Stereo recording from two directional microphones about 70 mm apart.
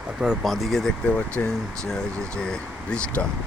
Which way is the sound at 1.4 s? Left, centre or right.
Left.